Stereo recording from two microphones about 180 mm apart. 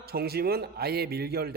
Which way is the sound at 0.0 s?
60° right (ahead or behind).